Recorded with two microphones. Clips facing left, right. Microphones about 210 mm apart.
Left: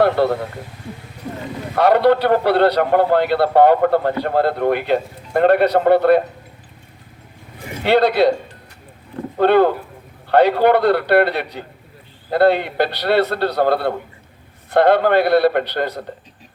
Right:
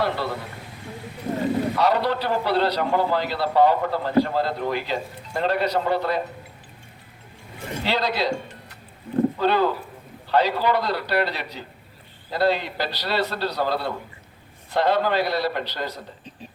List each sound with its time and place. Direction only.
0.0 s a man's voice: 60° left (ahead or behind)
1.7 s a man's voice: 60° left (ahead or behind)
7.9 s a man's voice: 60° left (ahead or behind)
9.4 s a man's voice: 60° left (ahead or behind)